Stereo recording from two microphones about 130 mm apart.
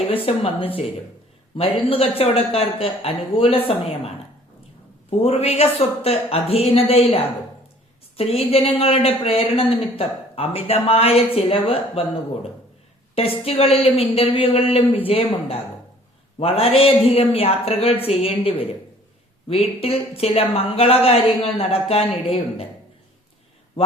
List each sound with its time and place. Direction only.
0.1 s speech: 45° left (ahead or behind)
1.9 s speech: 50° left (ahead or behind)
5.2 s speech: 50° left (ahead or behind)